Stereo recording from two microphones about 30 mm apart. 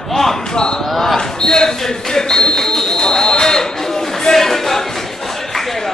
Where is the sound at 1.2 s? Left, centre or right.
Left.